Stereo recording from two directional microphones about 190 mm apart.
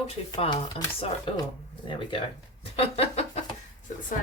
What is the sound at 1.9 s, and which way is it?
Speech, 25° left (ahead or behind).